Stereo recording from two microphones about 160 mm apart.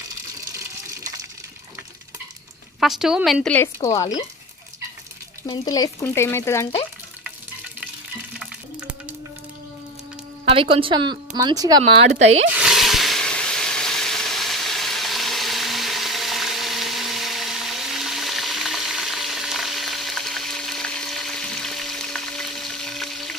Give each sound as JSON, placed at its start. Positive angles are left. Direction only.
{"t": 2.8, "sound": "a woman's voice", "side_deg": -5}
{"t": 3.4, "sound": "speech", "side_deg": 10}
{"t": 3.8, "sound": "speech", "side_deg": 20}
{"t": 5.4, "sound": "speech", "side_deg": 25}
{"t": 10.5, "sound": "speech", "side_deg": -35}
{"t": 12.5, "sound": "a sound", "side_deg": 0}